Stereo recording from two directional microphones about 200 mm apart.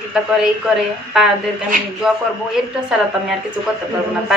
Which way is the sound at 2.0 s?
5° right (ahead or behind).